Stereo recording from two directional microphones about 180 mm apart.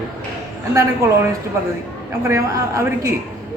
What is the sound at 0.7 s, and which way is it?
Speech, 15° right (ahead or behind).